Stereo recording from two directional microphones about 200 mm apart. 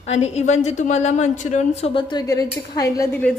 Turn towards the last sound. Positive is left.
turn(degrees=10)  # may be behind; listen again after turning